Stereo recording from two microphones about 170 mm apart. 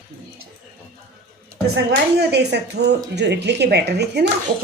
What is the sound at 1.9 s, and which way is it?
Speech, 80° right.